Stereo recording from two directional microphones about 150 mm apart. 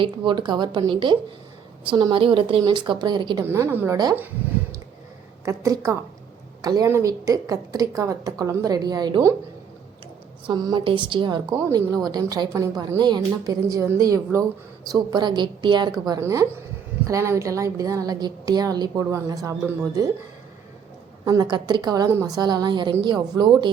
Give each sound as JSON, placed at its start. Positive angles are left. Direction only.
{"t": 0.0, "sound": "speech", "side_deg": -35}
{"t": 3.4, "sound": "a woman's voice", "side_deg": -15}
{"t": 5.5, "sound": "a woman's voice", "side_deg": -20}
{"t": 10.4, "sound": "a woman's voice", "side_deg": -25}
{"t": 21.5, "sound": "a woman's voice", "side_deg": -30}